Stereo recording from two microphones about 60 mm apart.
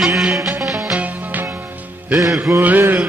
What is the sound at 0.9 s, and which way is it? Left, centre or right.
Music, right.